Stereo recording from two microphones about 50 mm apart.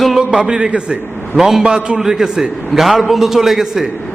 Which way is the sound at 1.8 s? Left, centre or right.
Right.